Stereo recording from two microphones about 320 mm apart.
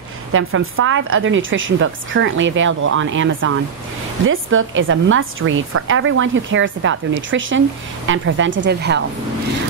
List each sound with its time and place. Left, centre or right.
0.3 s a woman's voice: right